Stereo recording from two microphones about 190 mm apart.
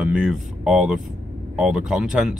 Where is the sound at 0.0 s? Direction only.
5° right (ahead or behind).